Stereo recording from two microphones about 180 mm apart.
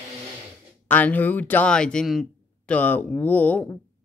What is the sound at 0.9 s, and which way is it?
Speech, 10° left (ahead or behind).